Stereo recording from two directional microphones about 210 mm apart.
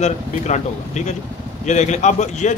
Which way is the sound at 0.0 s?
35° left (ahead or behind).